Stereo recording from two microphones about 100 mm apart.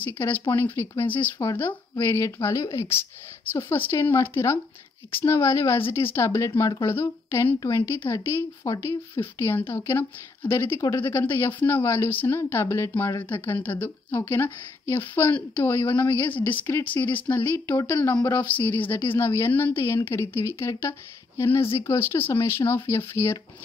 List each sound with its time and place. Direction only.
0.0 s speech: 20° left (ahead or behind)